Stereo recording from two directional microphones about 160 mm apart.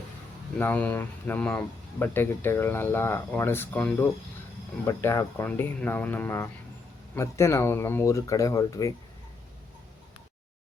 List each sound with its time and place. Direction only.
0.6 s speech: 10° left (ahead or behind)